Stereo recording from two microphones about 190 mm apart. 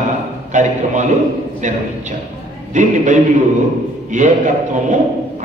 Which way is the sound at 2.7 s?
40° right (ahead or behind).